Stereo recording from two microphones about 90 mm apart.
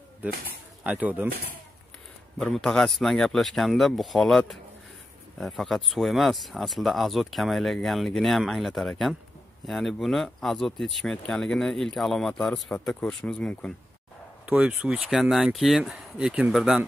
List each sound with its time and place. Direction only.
0.8 s speech: 20° right (ahead or behind)
2.3 s speech: 5° left (ahead or behind)
14.4 s speech: 15° right (ahead or behind)